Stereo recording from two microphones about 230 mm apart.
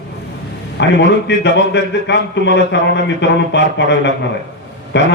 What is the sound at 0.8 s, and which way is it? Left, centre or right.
A man's voice, left.